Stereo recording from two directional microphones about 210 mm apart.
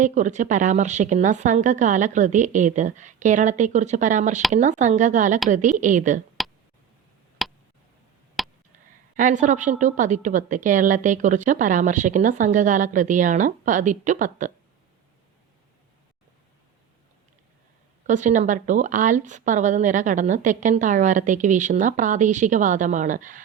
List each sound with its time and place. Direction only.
0.0 s a woman's voice: 35° right (ahead or behind)
6.4 s clicking: centre (ahead or behind)
7.4 s a sound: centre (ahead or behind)
9.1 s a woman's voice: 35° right (ahead or behind)
18.0 s a woman's voice: 35° right (ahead or behind)